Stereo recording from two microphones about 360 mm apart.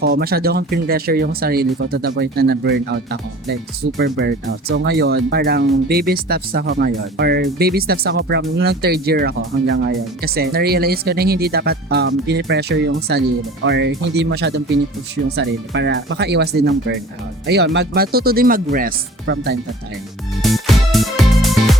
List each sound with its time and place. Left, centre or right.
0.0 s speech: right
20.4 s music: centre